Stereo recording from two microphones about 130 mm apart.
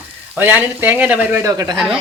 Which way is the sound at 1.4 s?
25° right (ahead or behind).